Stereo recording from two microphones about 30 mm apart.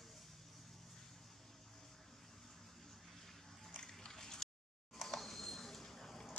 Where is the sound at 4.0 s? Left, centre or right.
Centre.